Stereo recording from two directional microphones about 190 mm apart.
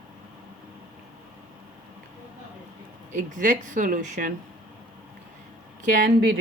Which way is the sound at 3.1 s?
40° right (ahead or behind).